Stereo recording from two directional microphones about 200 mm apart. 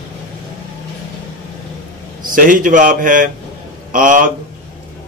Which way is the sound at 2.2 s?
45° right (ahead or behind).